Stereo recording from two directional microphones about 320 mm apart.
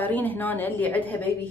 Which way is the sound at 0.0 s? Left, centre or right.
Centre.